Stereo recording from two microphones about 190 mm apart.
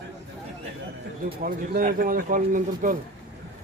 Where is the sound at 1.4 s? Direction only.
50° right (ahead or behind).